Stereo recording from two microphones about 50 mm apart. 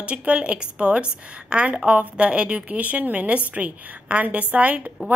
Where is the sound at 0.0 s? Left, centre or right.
Right.